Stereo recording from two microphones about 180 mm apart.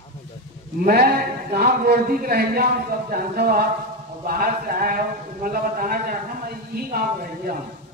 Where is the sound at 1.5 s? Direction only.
55° right (ahead or behind).